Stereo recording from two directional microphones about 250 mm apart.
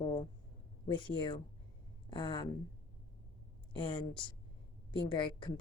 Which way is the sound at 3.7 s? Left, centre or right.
Centre.